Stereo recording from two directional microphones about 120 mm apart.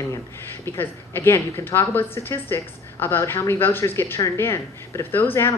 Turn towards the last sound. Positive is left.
turn(degrees=20)  # may be behind; listen again after turning